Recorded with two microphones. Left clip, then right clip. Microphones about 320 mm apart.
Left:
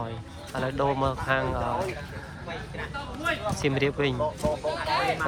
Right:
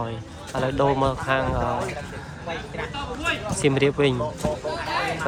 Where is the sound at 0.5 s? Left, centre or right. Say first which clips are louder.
Right 5 dB; centre.